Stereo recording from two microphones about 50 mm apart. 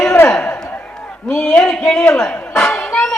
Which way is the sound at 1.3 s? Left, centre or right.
Centre.